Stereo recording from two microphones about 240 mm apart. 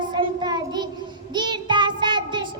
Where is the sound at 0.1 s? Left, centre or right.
Centre.